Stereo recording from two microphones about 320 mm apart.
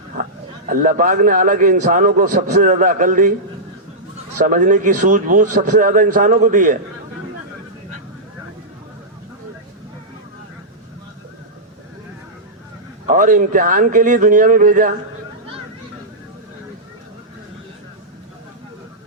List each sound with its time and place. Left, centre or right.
0.7 s a man's voice: right
4.4 s a man's voice: right
13.1 s a man's voice: right